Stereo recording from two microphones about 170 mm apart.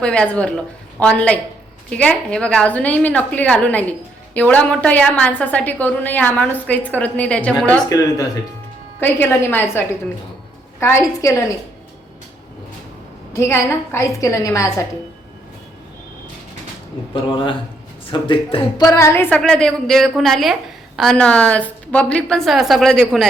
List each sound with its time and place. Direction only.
0.0 s a woman's voice: 5° left (ahead or behind)
7.9 s a woman's voice: 20° left (ahead or behind)
13.3 s a woman's voice: 15° left (ahead or behind)
17.3 s speech: 30° left (ahead or behind); by 23.2 s 5° left (ahead or behind)